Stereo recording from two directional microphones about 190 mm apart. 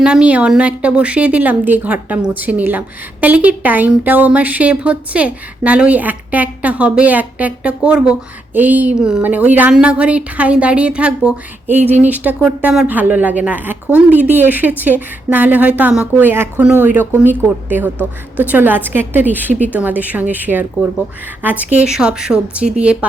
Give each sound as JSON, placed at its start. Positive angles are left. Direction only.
{"t": 0.0, "sound": "a woman's voice", "side_deg": -5}